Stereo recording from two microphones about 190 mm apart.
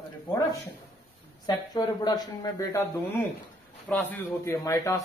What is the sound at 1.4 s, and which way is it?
A man's voice, 20° left (ahead or behind).